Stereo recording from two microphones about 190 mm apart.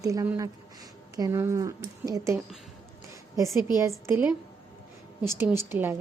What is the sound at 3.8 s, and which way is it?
Speech, 15° right (ahead or behind).